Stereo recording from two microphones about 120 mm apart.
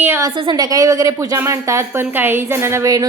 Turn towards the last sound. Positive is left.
turn(degrees=-25)  # may be behind; listen again after turning